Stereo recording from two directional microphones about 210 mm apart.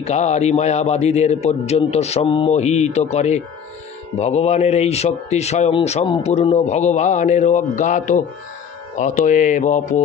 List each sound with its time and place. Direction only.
0.0 s a man's voice: 30° left (ahead or behind)